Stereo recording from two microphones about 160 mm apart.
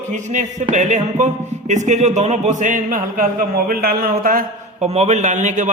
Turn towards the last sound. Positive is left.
turn(degrees=-50)  # may be behind; listen again after turning